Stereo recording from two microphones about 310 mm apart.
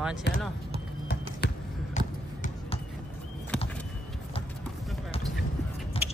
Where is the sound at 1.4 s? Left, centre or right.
Left.